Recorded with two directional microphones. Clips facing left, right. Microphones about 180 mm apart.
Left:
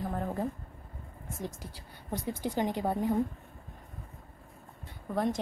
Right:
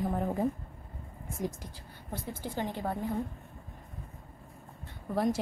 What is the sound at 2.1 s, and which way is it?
Speech, 15° left (ahead or behind).